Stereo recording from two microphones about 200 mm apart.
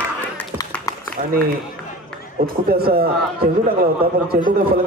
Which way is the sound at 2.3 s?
50° right (ahead or behind).